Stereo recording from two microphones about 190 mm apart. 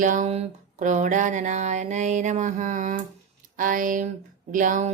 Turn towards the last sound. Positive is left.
turn(degrees=-40)  # may be behind; listen again after turning